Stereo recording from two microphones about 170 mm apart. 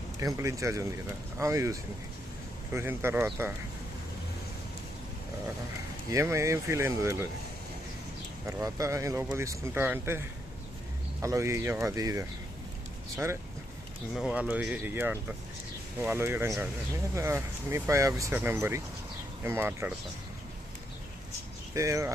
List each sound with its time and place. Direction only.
0.2 s speech: 20° right (ahead or behind)
6.1 s speech: 15° right (ahead or behind)
8.4 s speech: 15° right (ahead or behind)
14.1 s speech: centre (ahead or behind)
21.8 s speech: 15° right (ahead or behind)